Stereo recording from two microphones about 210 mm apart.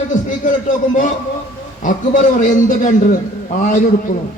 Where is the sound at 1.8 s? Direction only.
40° left (ahead or behind).